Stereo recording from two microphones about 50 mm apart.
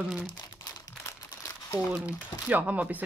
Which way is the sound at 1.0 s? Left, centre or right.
Left.